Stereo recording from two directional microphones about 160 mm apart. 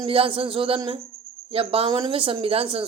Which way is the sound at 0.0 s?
35° right (ahead or behind).